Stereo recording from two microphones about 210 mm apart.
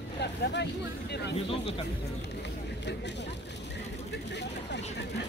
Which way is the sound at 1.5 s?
25° left (ahead or behind).